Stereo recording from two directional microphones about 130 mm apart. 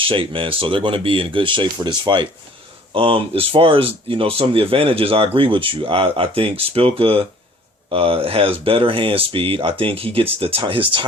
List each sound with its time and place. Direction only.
0.0 s speech: 45° right (ahead or behind)